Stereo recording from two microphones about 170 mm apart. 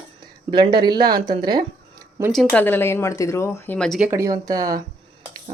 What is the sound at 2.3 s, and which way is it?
Speech, centre (ahead or behind).